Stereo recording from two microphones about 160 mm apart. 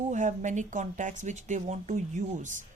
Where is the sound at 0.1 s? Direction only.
50° right (ahead or behind).